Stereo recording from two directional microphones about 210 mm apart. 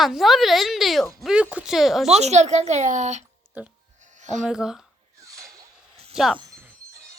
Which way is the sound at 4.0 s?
35° right (ahead or behind).